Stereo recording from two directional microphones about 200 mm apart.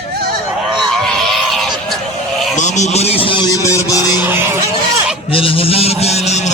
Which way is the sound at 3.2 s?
25° left (ahead or behind).